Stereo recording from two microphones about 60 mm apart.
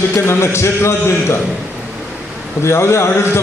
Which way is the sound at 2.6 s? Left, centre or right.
Left.